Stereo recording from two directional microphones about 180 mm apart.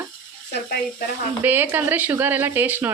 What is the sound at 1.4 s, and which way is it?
Speech, 10° right (ahead or behind).